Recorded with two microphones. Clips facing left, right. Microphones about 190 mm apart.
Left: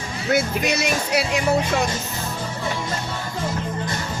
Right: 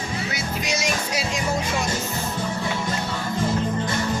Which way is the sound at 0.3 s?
55° left (ahead or behind).